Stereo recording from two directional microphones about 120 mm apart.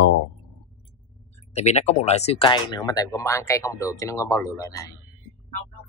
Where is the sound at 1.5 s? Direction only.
65° left (ahead or behind).